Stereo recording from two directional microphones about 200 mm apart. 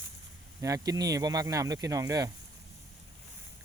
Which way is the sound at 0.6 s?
15° right (ahead or behind).